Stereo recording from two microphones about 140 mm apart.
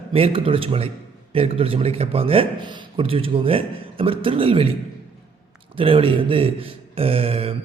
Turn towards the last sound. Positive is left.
turn(degrees=-45)  # may be behind; listen again after turning